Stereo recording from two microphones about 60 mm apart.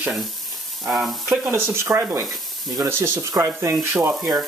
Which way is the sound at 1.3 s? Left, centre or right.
Right.